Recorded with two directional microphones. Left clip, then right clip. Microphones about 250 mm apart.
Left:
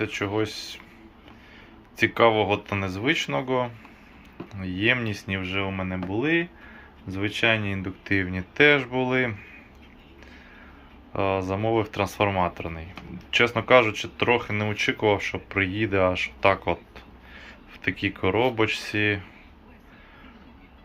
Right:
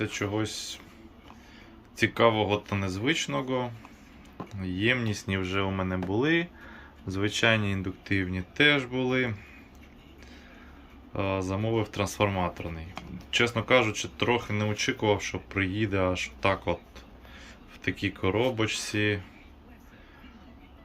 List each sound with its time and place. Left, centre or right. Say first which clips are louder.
0.0 s speech: left 4 dB; centre
2.1 s speech: left 4 dB; centre
11.1 s speech: left 5 dB; centre
18.0 s speech: left 4 dB; centre